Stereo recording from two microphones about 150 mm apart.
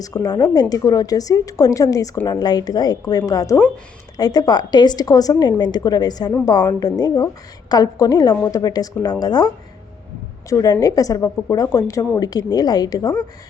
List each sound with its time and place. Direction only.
0.0 s a woman's voice: 25° left (ahead or behind)
10.5 s a woman's voice: 25° left (ahead or behind)